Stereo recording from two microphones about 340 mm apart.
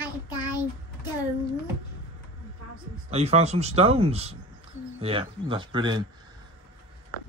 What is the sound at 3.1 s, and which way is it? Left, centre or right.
Speech, centre.